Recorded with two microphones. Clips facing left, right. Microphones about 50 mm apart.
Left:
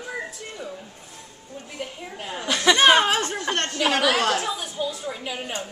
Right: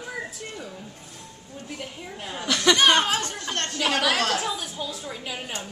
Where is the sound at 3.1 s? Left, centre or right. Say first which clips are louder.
Left 4 dB; left.